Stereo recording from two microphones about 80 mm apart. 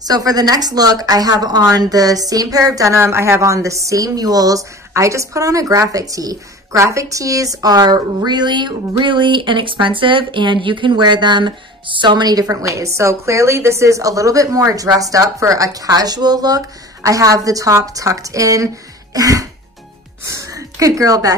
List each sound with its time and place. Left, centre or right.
0.0 s speech: right
9.0 s speech: right